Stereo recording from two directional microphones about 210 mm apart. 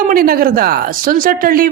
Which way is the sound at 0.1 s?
45° right (ahead or behind).